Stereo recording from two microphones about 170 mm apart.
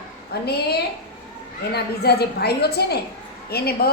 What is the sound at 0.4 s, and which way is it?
A woman's voice, 70° left (ahead or behind).